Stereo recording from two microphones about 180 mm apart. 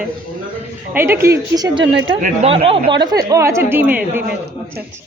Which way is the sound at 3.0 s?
20° right (ahead or behind).